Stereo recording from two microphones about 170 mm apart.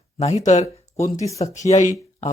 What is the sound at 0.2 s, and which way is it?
Speech, 40° left (ahead or behind).